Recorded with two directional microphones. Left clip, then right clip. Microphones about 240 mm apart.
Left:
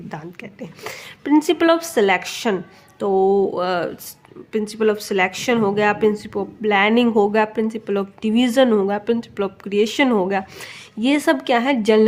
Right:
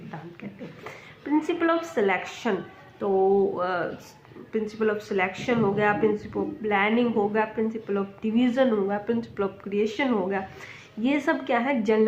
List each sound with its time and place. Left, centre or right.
0.9 s speech: left